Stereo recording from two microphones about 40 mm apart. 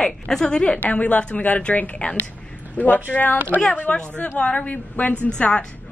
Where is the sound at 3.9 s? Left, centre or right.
Left.